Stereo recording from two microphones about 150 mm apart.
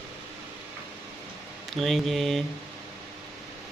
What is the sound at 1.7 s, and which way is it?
Mantra, centre (ahead or behind).